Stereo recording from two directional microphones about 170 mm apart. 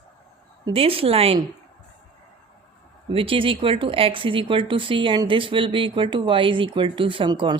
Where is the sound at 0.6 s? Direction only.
35° right (ahead or behind).